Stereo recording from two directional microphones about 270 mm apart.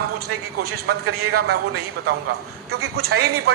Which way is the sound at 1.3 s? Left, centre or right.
Right.